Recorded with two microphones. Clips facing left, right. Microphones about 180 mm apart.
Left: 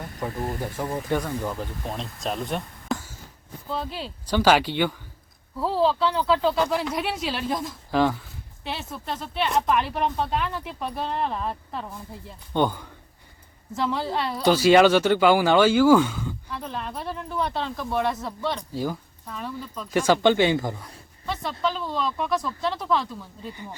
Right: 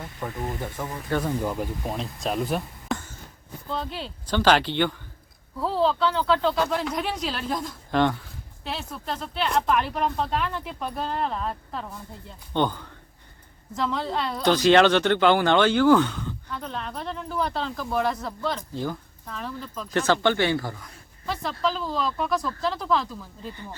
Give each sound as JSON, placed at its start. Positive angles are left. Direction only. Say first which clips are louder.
{"t": 1.2, "sound": "speech", "louder": "right 2 dB", "side_deg": -10}
{"t": 20.0, "sound": "speech", "louder": "left 3 dB", "side_deg": 15}
{"t": 21.6, "sound": "speech", "louder": "even", "side_deg": 0}